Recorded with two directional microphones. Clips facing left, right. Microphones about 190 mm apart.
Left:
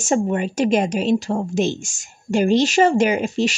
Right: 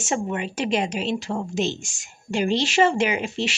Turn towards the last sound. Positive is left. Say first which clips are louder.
# left 6 dB
turn(degrees=40)  # may be behind; listen again after turning